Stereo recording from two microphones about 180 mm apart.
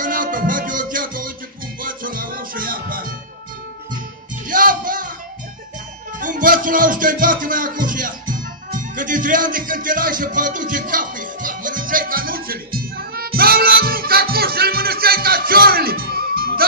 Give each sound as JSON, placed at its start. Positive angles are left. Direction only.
{"t": 0.0, "sound": "music", "side_deg": -50}
{"t": 4.5, "sound": "music", "side_deg": -50}
{"t": 6.1, "sound": "music", "side_deg": -45}